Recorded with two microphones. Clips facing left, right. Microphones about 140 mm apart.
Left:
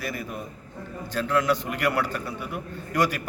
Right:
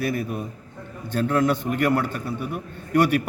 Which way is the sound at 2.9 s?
60° right (ahead or behind).